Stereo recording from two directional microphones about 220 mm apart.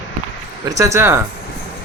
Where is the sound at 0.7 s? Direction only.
15° right (ahead or behind).